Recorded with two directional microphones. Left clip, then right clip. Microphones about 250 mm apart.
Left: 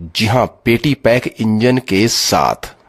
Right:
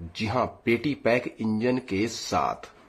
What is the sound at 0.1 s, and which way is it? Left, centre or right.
Speech, left.